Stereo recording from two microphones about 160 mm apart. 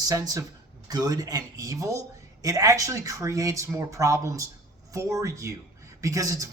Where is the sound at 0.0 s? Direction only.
20° right (ahead or behind).